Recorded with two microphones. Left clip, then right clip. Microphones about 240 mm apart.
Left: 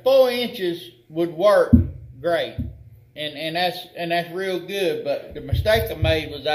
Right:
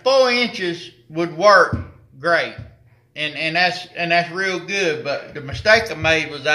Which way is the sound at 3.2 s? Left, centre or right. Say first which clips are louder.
Right 5 dB; right.